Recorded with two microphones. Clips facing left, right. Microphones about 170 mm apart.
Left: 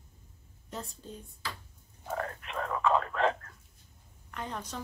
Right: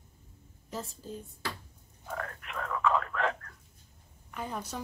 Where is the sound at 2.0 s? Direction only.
30° left (ahead or behind).